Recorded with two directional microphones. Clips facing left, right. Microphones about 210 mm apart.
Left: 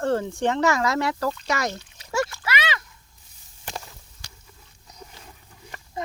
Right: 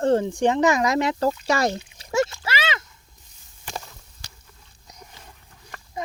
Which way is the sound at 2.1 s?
25° right (ahead or behind).